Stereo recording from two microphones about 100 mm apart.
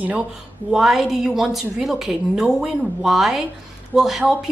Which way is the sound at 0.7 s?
5° right (ahead or behind).